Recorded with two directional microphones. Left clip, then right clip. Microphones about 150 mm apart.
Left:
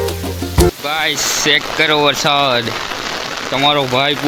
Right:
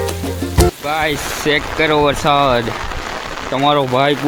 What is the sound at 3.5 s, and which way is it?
Speech, 15° right (ahead or behind).